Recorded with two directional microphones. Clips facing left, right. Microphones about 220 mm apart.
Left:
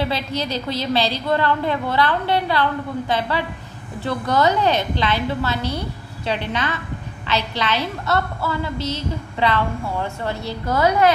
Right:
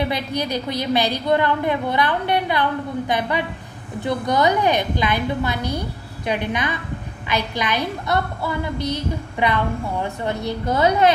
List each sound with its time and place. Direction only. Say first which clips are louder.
0.0 s a woman's voice: even; 15° right (ahead or behind)